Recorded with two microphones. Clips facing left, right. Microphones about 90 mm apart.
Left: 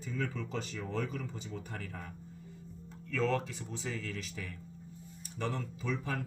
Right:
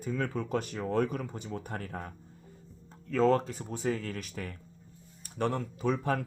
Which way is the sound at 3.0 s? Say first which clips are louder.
Right 7 dB; 40° right (ahead or behind).